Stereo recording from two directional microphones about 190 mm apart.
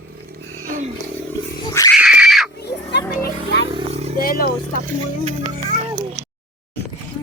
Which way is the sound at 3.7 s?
30° right (ahead or behind).